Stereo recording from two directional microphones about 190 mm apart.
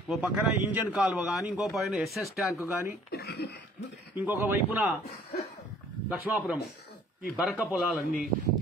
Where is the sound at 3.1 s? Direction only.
55° left (ahead or behind).